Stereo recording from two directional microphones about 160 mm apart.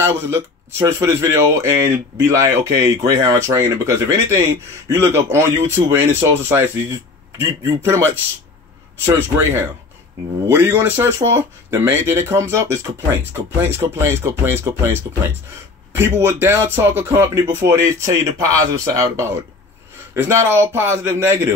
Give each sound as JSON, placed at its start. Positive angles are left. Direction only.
{"t": 0.0, "sound": "speech", "side_deg": -15}